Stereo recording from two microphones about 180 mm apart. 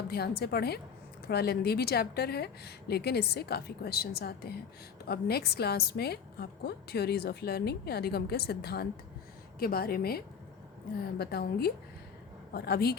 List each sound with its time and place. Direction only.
0.1 s a woman's voice: 60° left (ahead or behind)